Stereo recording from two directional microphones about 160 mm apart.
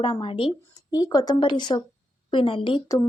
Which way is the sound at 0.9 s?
20° left (ahead or behind).